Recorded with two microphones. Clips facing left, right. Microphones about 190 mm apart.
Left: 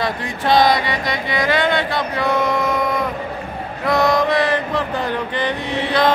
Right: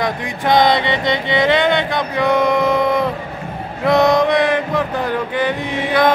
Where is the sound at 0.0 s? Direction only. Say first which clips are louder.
Right 2 dB; 20° right (ahead or behind).